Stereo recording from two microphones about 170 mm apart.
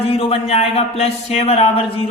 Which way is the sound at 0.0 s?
35° left (ahead or behind).